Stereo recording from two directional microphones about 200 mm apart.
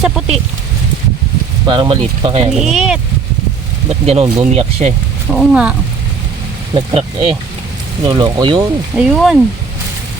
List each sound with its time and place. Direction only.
1.6 s speech: 25° right (ahead or behind)
2.5 s speech: centre (ahead or behind)
3.8 s speech: 30° right (ahead or behind)
5.3 s speech: centre (ahead or behind)
6.7 s speech: 25° right (ahead or behind)
9.0 s speech: 5° right (ahead or behind)